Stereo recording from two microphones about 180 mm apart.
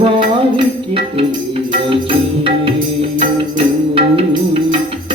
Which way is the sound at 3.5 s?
30° right (ahead or behind).